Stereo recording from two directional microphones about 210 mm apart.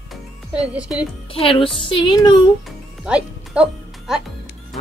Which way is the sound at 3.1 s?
5° right (ahead or behind).